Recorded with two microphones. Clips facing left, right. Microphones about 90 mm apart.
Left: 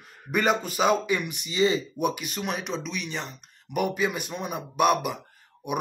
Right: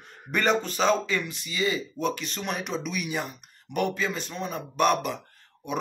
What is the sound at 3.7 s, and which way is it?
Speech, 10° left (ahead or behind).